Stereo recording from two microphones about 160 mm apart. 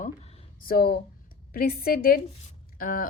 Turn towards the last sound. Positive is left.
turn(degrees=60)  # may be behind; listen again after turning